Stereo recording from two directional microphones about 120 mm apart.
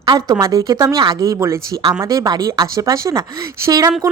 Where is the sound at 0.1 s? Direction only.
35° right (ahead or behind).